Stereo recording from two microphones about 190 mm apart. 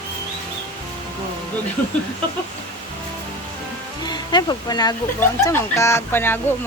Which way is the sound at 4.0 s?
20° left (ahead or behind).